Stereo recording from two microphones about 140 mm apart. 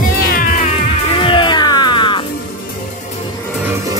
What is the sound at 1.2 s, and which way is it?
Music, 35° left (ahead or behind).